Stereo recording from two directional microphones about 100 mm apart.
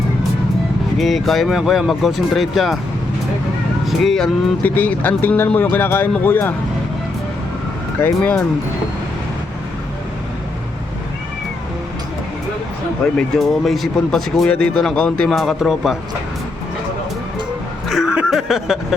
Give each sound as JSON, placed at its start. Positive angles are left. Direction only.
{"t": 0.9, "sound": "speech", "side_deg": 0}
{"t": 3.8, "sound": "speech", "side_deg": 0}
{"t": 4.6, "sound": "speech", "side_deg": 20}
{"t": 7.9, "sound": "speech", "side_deg": 20}
{"t": 13.1, "sound": "speech", "side_deg": 0}
{"t": 17.8, "sound": "vehicle", "side_deg": 0}